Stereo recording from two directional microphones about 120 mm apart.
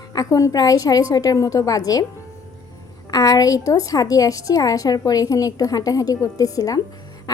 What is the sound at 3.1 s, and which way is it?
A woman's voice, 30° left (ahead or behind).